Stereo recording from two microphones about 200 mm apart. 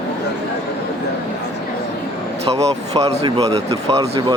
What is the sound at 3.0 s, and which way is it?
Speech, 25° right (ahead or behind).